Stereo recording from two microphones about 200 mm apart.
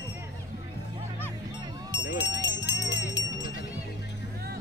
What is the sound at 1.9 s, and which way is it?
Music, 60° left (ahead or behind).